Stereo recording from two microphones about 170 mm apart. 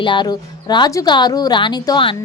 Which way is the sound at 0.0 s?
25° left (ahead or behind).